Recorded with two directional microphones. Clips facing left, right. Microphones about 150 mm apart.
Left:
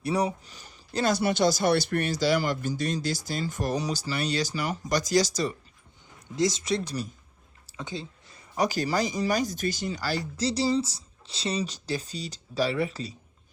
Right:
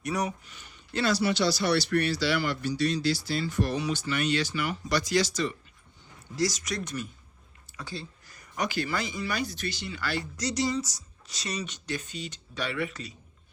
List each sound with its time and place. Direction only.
0.0 s speech: 30° left (ahead or behind)
6.3 s speech: 25° left (ahead or behind)
7.8 s a sound: 20° left (ahead or behind)
8.6 s speech: 40° left (ahead or behind)